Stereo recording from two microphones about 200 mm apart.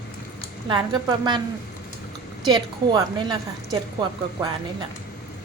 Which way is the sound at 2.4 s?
20° right (ahead or behind).